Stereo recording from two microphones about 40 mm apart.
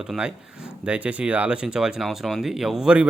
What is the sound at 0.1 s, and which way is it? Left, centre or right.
Speech, centre.